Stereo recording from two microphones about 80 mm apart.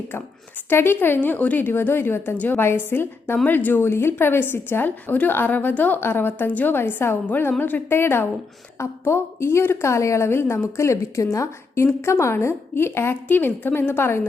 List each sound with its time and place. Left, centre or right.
0.7 s a woman's voice: left